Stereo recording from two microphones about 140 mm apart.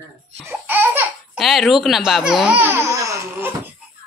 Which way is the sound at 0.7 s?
15° right (ahead or behind).